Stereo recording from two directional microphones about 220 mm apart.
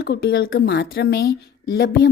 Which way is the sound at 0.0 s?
45° left (ahead or behind).